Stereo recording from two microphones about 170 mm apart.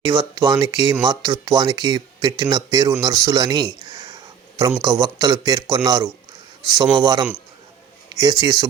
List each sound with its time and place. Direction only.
0.0 s speech: 30° right (ahead or behind)
3.0 s a sound: 20° right (ahead or behind)
4.8 s speech: 20° right (ahead or behind)